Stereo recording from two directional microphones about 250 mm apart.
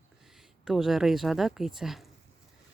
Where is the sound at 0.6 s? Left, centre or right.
Centre.